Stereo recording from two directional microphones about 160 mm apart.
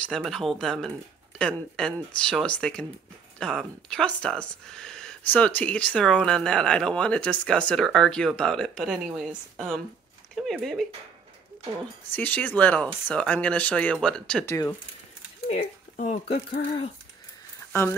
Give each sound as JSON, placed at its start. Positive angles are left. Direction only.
{"t": 0.0, "sound": "speech", "side_deg": 0}
{"t": 12.1, "sound": "speech", "side_deg": 10}
{"t": 14.4, "sound": "speech", "side_deg": 15}
{"t": 15.4, "sound": "speech", "side_deg": 45}